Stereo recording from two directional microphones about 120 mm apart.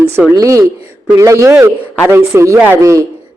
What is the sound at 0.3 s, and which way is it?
A man's voice, 25° right (ahead or behind).